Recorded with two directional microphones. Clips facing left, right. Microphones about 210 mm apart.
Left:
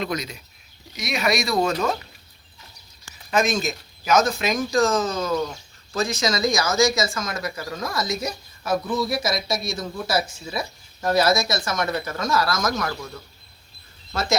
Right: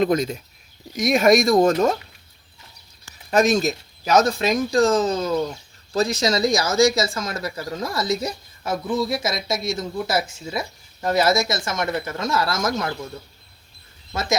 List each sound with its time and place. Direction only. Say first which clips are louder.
0.0 s speech: right 8 dB; 50° right (ahead or behind)
3.2 s speech: right 4 dB; 40° right (ahead or behind)
14.1 s speech: even; 20° right (ahead or behind)